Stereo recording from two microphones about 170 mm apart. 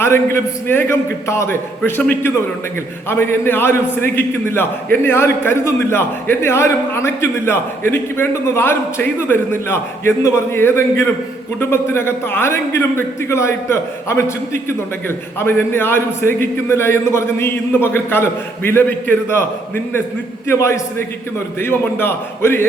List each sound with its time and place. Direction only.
0.0 s a man's voice: 15° left (ahead or behind)